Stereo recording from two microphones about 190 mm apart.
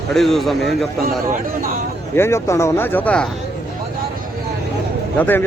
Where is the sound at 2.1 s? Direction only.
15° left (ahead or behind).